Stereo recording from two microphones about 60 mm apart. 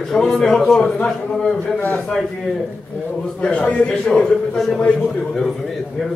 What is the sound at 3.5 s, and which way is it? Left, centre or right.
A man's voice, left.